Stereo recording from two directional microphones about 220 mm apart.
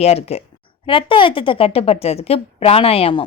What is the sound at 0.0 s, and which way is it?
A woman's voice, 30° left (ahead or behind).